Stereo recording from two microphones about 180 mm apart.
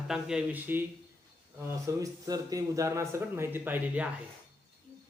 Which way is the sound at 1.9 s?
20° right (ahead or behind).